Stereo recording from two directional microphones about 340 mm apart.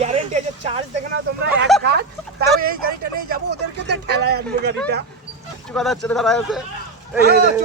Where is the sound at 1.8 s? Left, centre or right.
Right.